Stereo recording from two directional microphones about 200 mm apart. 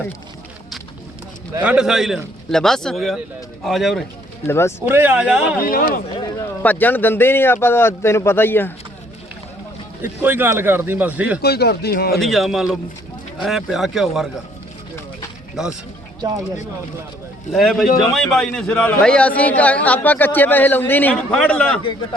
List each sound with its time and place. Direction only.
1.6 s a man's voice: 5° right (ahead or behind)
4.4 s a man's voice: 10° left (ahead or behind)
4.9 s speech: 10° right (ahead or behind)
5.5 s speech: 45° left (ahead or behind)
6.1 s a man's voice: 15° left (ahead or behind)
10.0 s speech: 10° right (ahead or behind)
11.4 s speech: 55° left (ahead or behind)
12.2 s a man's voice: centre (ahead or behind)
15.6 s a man's voice: centre (ahead or behind)
17.5 s a man's voice: centre (ahead or behind)